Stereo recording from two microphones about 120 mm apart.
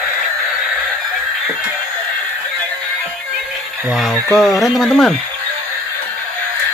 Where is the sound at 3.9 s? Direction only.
Centre (ahead or behind).